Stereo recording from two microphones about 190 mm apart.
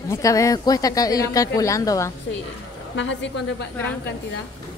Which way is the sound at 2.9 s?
70° left (ahead or behind).